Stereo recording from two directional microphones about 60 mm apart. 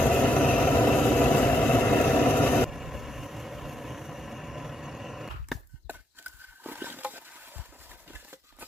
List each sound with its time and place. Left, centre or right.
0.1 s vehicle: centre
0.9 s vehicle: centre
2.6 s vehicle: centre
5.9 s a sound: right